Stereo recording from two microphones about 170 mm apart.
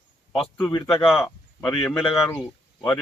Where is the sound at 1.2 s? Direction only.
10° left (ahead or behind).